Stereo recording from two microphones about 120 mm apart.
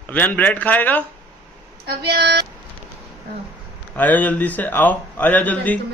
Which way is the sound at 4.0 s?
15° left (ahead or behind).